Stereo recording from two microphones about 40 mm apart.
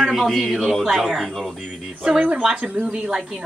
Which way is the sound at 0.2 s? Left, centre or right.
Centre.